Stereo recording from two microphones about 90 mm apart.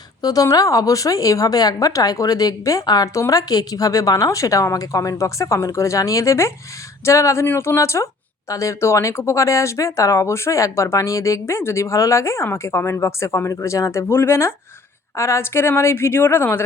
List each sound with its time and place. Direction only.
0.2 s a woman's voice: 45° left (ahead or behind); by 16.6 s 25° left (ahead or behind)